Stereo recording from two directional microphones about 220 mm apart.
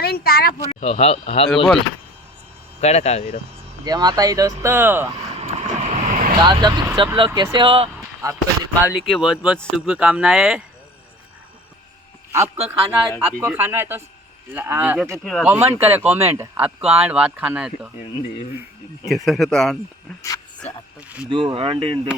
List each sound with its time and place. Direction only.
0.0 s speech: 45° left (ahead or behind)
0.7 s speech: 30° left (ahead or behind)
2.8 s speech: 30° left (ahead or behind)
3.8 s speech: 20° right (ahead or behind)
5.3 s vehicle: 30° right (ahead or behind)
6.4 s speech: 20° right (ahead or behind)
9.0 s speech: centre (ahead or behind)
12.3 s speech: 10° right (ahead or behind)
15.2 s speech: 5° left (ahead or behind)
15.4 s speech: 10° right (ahead or behind)
19.0 s speech: centre (ahead or behind)
21.2 s speech: 20° right (ahead or behind)